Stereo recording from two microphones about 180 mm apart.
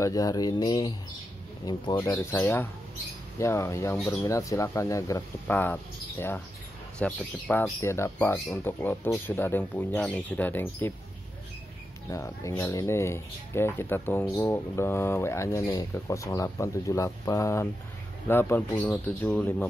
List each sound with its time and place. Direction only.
0.0 s speech: 20° left (ahead or behind)
12.1 s speech: 15° left (ahead or behind)